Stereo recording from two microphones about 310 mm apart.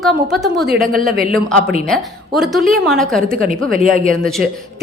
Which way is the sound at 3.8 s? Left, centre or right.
Right.